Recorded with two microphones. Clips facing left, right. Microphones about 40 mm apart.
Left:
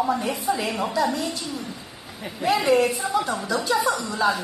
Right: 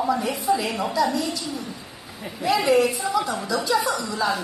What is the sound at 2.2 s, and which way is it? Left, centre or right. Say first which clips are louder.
A woman's voice: even; left.